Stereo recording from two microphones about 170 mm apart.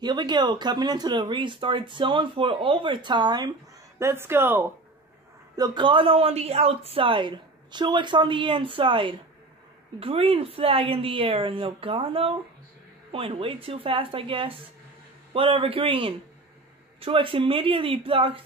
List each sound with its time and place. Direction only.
0.0 s speech: 25° right (ahead or behind)
4.0 s speech: 15° right (ahead or behind)
5.6 s a woman's voice: 30° right (ahead or behind)